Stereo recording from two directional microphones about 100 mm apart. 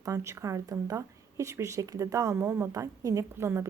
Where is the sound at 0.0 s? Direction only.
30° right (ahead or behind).